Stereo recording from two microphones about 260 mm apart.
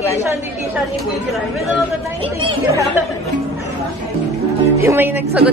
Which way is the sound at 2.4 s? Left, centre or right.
Centre.